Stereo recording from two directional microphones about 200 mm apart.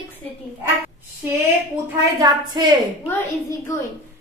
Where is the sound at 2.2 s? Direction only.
20° right (ahead or behind).